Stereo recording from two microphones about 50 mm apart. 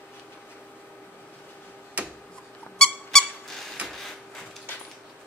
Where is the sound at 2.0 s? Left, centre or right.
Right.